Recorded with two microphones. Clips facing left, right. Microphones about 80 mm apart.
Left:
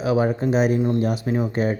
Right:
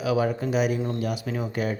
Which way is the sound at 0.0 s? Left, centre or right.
Left.